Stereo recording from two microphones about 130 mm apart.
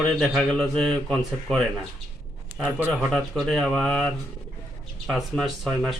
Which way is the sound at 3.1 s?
5° left (ahead or behind).